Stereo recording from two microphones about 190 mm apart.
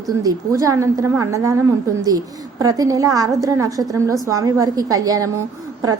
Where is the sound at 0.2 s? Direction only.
15° right (ahead or behind).